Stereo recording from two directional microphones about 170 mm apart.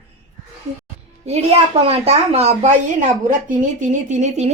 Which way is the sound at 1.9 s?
40° right (ahead or behind).